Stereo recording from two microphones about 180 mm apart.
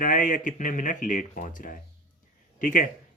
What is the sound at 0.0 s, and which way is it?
Speech, 45° left (ahead or behind).